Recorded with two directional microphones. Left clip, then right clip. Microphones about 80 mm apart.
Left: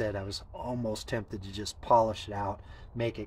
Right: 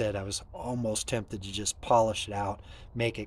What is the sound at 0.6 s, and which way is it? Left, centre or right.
Speech, right.